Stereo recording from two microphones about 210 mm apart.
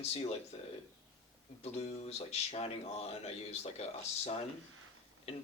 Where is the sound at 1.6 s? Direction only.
30° left (ahead or behind).